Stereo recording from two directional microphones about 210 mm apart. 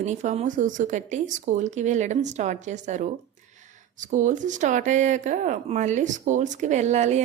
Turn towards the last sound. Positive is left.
turn(degrees=-35)  # may be behind; listen again after turning